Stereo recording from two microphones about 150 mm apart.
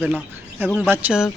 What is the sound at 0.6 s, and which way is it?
Speech, 5° left (ahead or behind).